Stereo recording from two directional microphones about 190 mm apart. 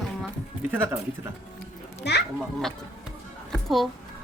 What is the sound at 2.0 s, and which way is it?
Speech, 60° left (ahead or behind).